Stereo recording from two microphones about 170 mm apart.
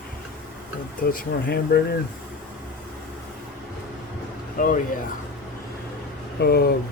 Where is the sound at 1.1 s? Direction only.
60° left (ahead or behind).